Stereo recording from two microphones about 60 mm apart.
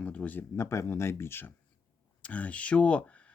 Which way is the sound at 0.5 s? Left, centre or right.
Left.